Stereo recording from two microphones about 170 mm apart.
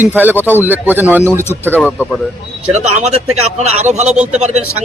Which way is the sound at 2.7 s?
45° right (ahead or behind).